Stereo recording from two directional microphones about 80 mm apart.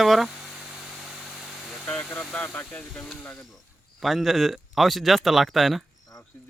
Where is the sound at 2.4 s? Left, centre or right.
Left.